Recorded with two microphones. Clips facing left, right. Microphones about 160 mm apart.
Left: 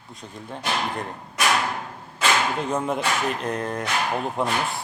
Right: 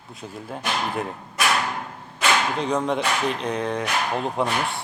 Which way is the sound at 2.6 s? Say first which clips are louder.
Right 2 dB; 5° left (ahead or behind).